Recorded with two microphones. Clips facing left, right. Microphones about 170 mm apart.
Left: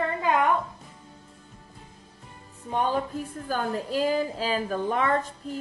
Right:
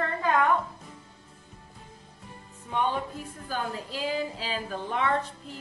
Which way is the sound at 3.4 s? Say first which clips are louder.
Left 4 dB; 50° left (ahead or behind).